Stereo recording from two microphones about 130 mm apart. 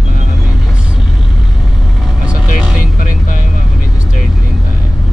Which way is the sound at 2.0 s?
5° right (ahead or behind).